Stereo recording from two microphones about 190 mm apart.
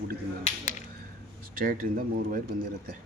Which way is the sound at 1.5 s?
50° right (ahead or behind).